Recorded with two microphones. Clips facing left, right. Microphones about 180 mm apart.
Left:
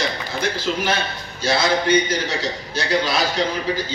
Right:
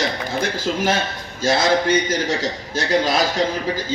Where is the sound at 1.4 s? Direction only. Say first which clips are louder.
Right 2 dB; 45° right (ahead or behind).